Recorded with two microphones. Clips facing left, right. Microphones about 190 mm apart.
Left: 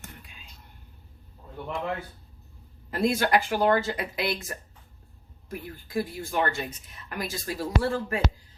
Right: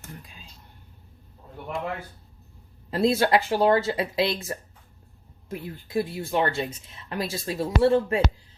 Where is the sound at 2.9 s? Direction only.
25° right (ahead or behind).